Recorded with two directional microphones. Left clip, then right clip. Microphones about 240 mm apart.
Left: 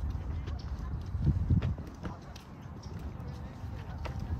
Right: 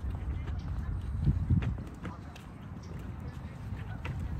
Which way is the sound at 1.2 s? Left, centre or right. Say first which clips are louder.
Even; left.